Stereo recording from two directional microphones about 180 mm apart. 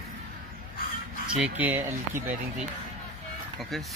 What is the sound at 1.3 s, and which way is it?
Speech, 10° right (ahead or behind).